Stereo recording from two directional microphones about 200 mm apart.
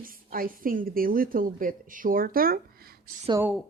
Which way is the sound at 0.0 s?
45° right (ahead or behind).